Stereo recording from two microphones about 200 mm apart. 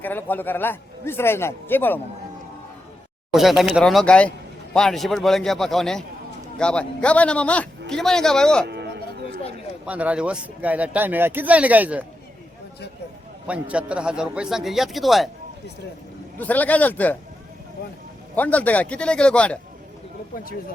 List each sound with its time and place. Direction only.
0.0 s a man's voice: 10° left (ahead or behind)
3.3 s a man's voice: centre (ahead or behind)
8.6 s a sound: 55° right (ahead or behind)
9.8 s speech: 5° right (ahead or behind)
13.5 s a man's voice: 5° right (ahead or behind)
16.4 s a man's voice: 10° left (ahead or behind)
18.3 s a man's voice: 10° left (ahead or behind)
20.3 s speech: 45° left (ahead or behind)